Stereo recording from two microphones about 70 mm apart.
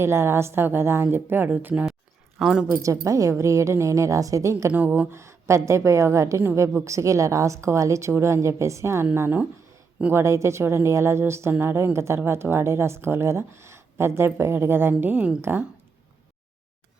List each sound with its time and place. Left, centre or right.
0.0 s speech: right
1.5 s speech: right
2.4 s speech: centre
2.8 s a woman's voice: right